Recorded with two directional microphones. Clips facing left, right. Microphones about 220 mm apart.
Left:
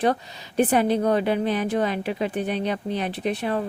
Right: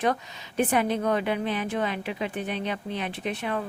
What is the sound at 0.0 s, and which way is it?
Speech, 35° left (ahead or behind).